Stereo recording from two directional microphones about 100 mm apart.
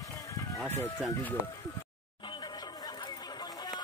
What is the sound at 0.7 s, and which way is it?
Speech, 25° left (ahead or behind).